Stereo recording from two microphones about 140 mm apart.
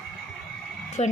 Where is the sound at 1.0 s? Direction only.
50° left (ahead or behind).